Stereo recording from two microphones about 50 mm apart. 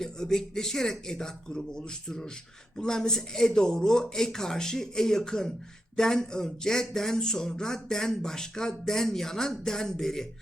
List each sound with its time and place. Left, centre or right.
0.0 s speech: centre